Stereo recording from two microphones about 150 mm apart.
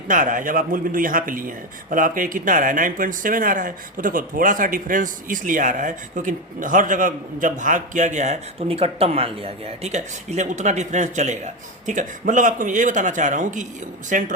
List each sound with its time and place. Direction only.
0.1 s a man's voice: 60° right (ahead or behind)